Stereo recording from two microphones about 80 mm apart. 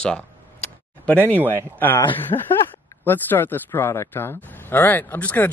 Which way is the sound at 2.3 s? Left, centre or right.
Left.